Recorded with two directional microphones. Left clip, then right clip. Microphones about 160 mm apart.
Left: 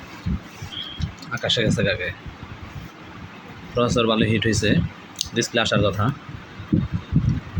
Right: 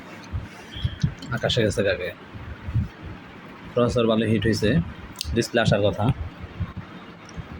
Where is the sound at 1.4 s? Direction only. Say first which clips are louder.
Left 1 dB; 20° right (ahead or behind).